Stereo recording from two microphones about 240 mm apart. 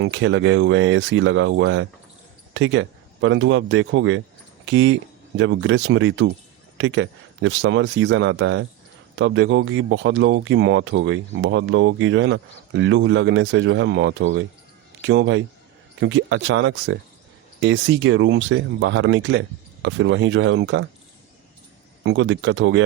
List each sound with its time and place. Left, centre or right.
0.0 s speech: right
22.0 s speech: right